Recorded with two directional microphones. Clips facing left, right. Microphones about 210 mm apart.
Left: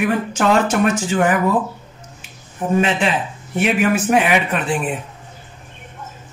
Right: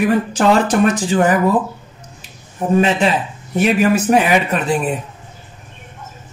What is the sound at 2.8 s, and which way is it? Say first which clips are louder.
Speech: right 3 dB; 40° right (ahead or behind).